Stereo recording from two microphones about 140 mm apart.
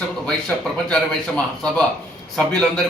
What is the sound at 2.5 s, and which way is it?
Speech, 5° left (ahead or behind).